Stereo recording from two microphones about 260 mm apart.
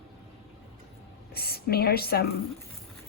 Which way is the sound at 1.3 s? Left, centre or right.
Left.